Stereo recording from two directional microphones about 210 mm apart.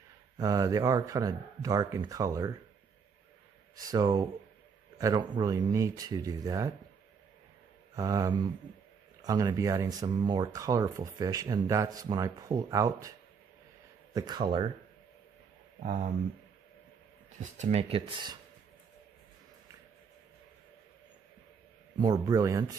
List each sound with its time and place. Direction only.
0.4 s speech: 15° right (ahead or behind)
3.7 s speech: 15° right (ahead or behind)
7.9 s speech: 15° right (ahead or behind)
14.1 s speech: 20° right (ahead or behind)
15.8 s speech: 35° right (ahead or behind)
17.4 s speech: 35° right (ahead or behind)
22.0 s speech: 20° right (ahead or behind)